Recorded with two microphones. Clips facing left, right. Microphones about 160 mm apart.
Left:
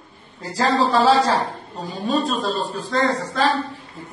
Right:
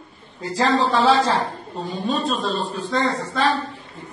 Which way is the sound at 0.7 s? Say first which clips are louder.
Left 2 dB; 35° left (ahead or behind).